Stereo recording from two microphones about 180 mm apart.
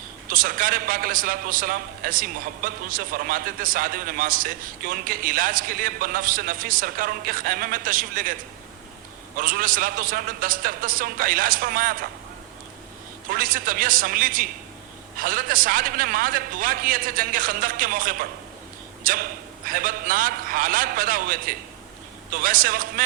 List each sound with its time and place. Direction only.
0.3 s a man's voice: 50° right (ahead or behind)
13.3 s a man's voice: 50° right (ahead or behind)